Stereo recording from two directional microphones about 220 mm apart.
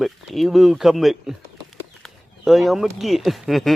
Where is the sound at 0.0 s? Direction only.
Centre (ahead or behind).